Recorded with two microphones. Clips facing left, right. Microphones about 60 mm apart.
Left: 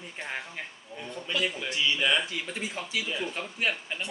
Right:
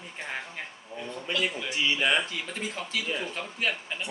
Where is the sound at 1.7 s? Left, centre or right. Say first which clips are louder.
Right 1 dB; right.